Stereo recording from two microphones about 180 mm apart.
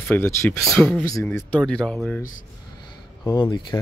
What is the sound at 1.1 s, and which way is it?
Speech, 15° left (ahead or behind).